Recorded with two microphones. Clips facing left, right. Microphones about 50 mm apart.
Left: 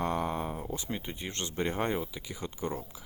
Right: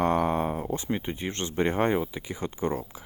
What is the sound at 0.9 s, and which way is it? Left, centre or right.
Speech, right.